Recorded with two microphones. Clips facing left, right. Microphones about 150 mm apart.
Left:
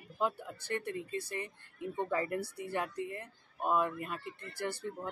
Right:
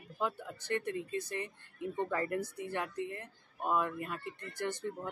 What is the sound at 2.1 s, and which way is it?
Speech, 10° left (ahead or behind).